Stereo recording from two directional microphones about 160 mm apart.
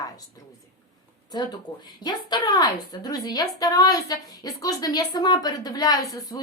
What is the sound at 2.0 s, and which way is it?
A woman's voice, 25° left (ahead or behind).